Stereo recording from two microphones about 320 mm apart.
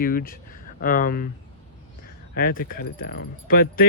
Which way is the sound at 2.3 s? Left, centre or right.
Left.